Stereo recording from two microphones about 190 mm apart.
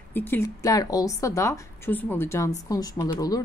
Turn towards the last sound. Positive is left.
turn(degrees=20)  # may be behind; listen again after turning